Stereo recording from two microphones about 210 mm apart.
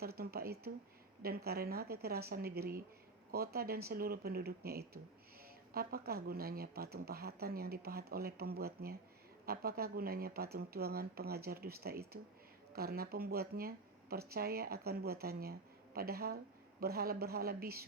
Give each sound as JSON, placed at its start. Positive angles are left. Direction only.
{"t": 0.0, "sound": "speech", "side_deg": -45}